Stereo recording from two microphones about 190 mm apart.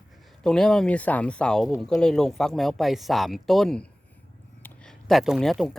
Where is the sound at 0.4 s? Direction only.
5° left (ahead or behind).